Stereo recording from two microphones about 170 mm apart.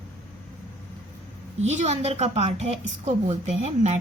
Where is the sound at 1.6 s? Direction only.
40° right (ahead or behind).